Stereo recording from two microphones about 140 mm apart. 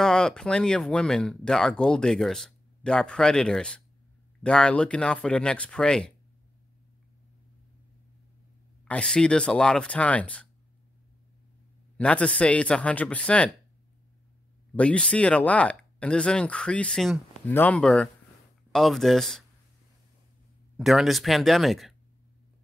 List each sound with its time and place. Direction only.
0.0 s speech: 5° left (ahead or behind)
8.8 s speech: 5° left (ahead or behind)
12.0 s speech: 10° left (ahead or behind)
14.8 s speech: 10° left (ahead or behind)
20.7 s speech: centre (ahead or behind)